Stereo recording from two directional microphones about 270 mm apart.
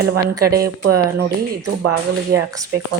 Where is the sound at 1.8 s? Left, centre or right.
Right.